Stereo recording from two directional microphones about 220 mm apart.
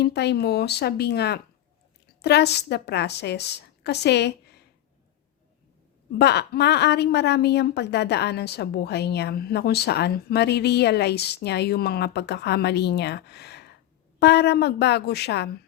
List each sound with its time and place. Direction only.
0.0 s a woman's voice: 50° left (ahead or behind)
6.1 s a woman's voice: 50° left (ahead or behind)